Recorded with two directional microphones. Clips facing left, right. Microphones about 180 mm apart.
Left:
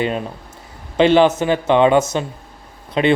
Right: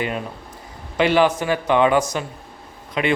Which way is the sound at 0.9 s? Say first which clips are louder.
Left 4 dB; 25° left (ahead or behind).